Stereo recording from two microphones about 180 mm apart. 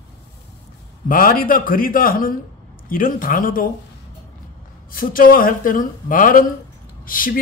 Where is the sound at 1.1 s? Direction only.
55° left (ahead or behind).